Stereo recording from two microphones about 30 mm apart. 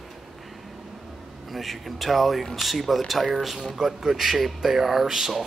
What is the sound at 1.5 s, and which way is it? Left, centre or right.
Speech, centre.